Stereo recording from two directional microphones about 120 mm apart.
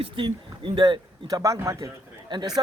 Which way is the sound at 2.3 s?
40° right (ahead or behind).